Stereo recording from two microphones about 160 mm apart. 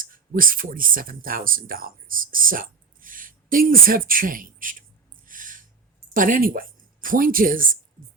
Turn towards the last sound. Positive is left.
turn(degrees=-60)  # may be behind; listen again after turning